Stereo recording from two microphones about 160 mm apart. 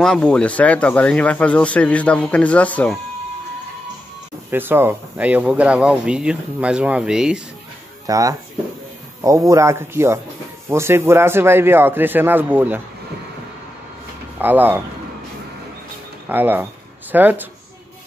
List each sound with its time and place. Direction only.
0.0 s speech: 5° left (ahead or behind)
4.5 s speech: 15° right (ahead or behind)
8.1 s speech: 20° right (ahead or behind)
9.5 s speech: 15° right (ahead or behind)
14.4 s speech: 10° right (ahead or behind)
16.3 s speech: 10° right (ahead or behind)